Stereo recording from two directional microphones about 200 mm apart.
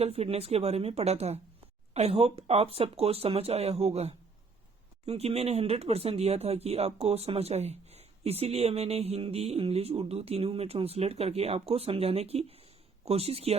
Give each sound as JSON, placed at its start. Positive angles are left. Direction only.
{"t": 0.0, "sound": "speech", "side_deg": -30}